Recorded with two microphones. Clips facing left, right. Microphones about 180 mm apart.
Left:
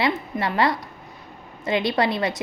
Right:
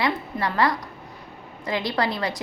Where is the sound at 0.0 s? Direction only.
25° left (ahead or behind).